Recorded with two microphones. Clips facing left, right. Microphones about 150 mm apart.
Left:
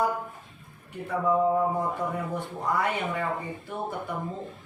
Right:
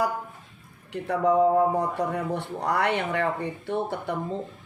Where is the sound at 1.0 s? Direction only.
80° right.